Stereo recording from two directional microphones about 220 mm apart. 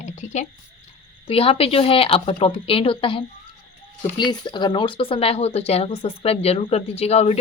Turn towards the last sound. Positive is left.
turn(degrees=30)  # may be behind; listen again after turning